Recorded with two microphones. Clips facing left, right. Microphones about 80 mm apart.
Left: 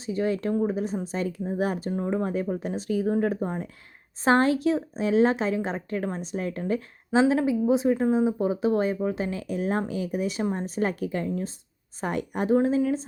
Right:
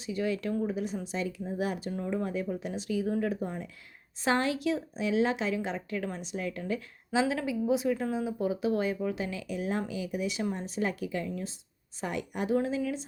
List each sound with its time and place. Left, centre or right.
0.0 s a woman's voice: left